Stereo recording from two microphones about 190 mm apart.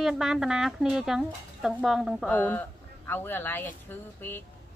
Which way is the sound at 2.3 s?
10° left (ahead or behind).